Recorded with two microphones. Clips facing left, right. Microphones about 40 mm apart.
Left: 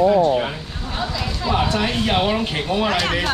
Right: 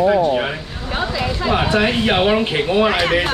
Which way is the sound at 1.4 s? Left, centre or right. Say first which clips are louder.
Right 3 dB; right.